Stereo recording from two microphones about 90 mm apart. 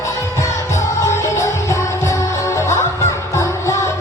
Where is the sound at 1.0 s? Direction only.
35° left (ahead or behind).